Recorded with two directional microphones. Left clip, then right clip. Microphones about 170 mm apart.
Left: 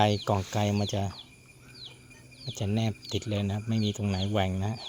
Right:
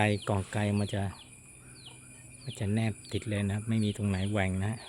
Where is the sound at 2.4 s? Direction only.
5° left (ahead or behind).